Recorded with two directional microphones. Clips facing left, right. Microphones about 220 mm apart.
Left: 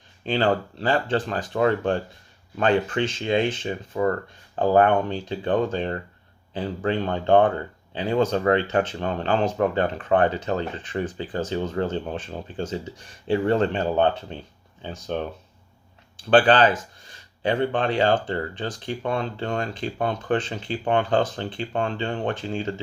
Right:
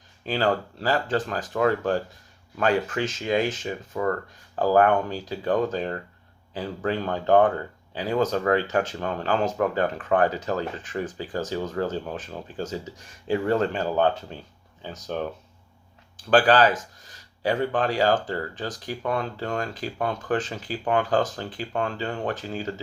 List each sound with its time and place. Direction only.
0.3 s speech: 25° left (ahead or behind)